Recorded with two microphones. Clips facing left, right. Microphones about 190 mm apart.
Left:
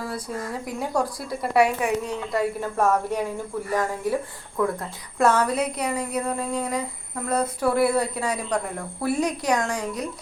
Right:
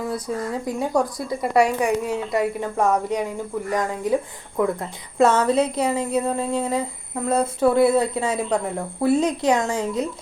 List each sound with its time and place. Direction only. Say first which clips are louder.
1.3 s speech: right 1 dB; 5° left (ahead or behind)
2.3 s speech: even; 15° right (ahead or behind)